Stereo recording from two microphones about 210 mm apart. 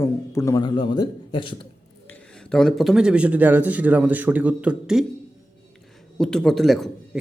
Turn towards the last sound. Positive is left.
turn(degrees=0)  # may be behind; listen again after turning